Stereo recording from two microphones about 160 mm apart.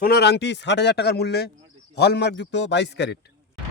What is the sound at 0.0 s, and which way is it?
Speech, 85° left.